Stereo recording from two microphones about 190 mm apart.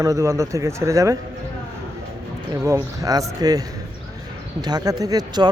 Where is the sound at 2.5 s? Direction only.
15° right (ahead or behind).